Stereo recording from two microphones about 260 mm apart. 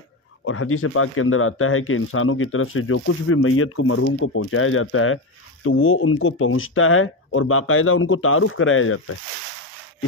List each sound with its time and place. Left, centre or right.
0.5 s speech: left